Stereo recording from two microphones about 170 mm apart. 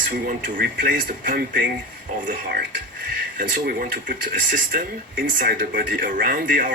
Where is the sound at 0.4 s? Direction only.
55° right (ahead or behind).